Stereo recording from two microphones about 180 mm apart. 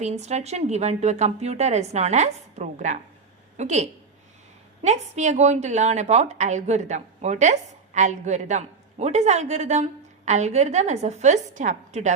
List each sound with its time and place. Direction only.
0.0 s a woman's voice: 40° right (ahead or behind)